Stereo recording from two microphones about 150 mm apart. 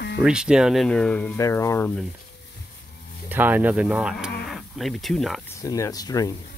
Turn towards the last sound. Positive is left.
turn(degrees=25)  # may be behind; listen again after turning